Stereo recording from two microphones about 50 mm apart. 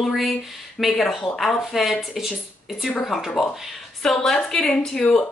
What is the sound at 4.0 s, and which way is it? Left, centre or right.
A woman's voice, centre.